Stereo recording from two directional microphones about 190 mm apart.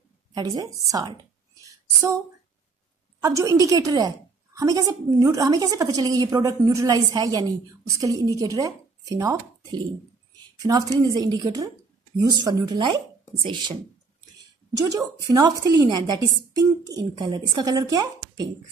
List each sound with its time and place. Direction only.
0.3 s a woman's voice: 20° right (ahead or behind)
1.6 s a sound: 15° right (ahead or behind)
3.2 s a woman's voice: 15° right (ahead or behind)
15.2 s a woman's voice: 20° right (ahead or behind)